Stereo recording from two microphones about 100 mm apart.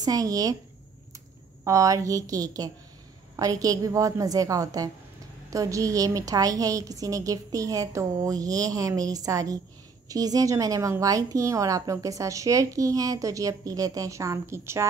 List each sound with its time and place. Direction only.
0.0 s a woman's voice: 35° right (ahead or behind)
1.6 s a woman's voice: 30° right (ahead or behind)